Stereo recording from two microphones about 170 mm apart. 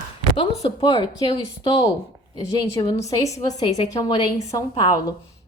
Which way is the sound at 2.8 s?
25° left (ahead or behind).